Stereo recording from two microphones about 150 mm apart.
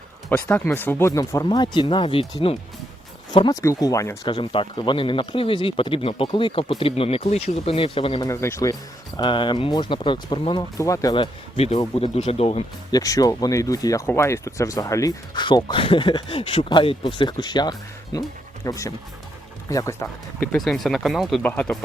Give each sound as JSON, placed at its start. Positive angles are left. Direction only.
{"t": 0.3, "sound": "speech", "side_deg": 10}
{"t": 8.2, "sound": "speech", "side_deg": 20}
{"t": 9.1, "sound": "speech", "side_deg": 30}
{"t": 10.8, "sound": "speech", "side_deg": 20}
{"t": 11.1, "sound": "speech", "side_deg": 40}
{"t": 12.9, "sound": "speech", "side_deg": 25}
{"t": 20.5, "sound": "speech", "side_deg": 0}